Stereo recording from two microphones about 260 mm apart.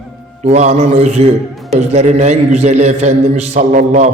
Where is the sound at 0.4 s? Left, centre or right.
Right.